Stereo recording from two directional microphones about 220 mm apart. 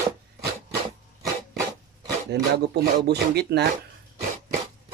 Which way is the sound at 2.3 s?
45° right (ahead or behind).